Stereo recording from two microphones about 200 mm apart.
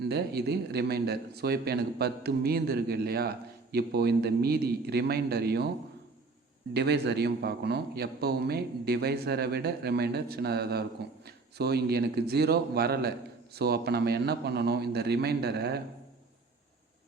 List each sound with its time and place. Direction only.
0.0 s speech: 55° right (ahead or behind)
6.7 s speech: 55° right (ahead or behind)